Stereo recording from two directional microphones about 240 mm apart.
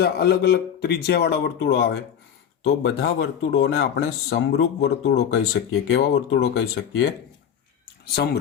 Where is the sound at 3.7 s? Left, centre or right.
Left.